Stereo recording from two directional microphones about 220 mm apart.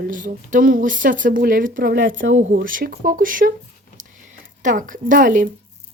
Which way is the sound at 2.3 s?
35° right (ahead or behind).